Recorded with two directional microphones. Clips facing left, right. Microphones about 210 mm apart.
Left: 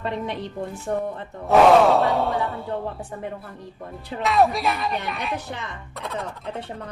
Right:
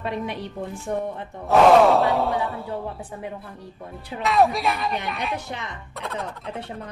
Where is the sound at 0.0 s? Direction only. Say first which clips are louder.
Left 1 dB; 10° right (ahead or behind).